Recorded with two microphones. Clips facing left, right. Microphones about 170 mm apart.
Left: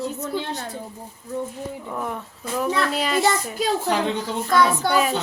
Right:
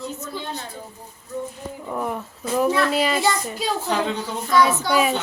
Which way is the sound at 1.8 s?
10° right (ahead or behind).